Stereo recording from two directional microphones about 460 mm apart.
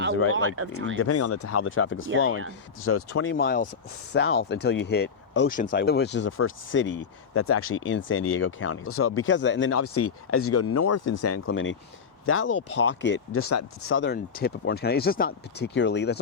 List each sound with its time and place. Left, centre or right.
0.1 s speech: left
0.3 s speech: right
0.9 s speech: left